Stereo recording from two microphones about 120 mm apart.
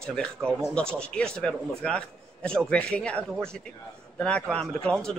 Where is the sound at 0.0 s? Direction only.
5° left (ahead or behind).